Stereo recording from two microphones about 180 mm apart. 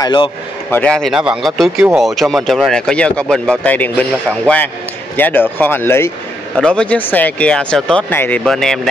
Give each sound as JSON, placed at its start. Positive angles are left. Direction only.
{"t": 0.0, "sound": "speech", "side_deg": 25}
{"t": 0.7, "sound": "speech", "side_deg": 5}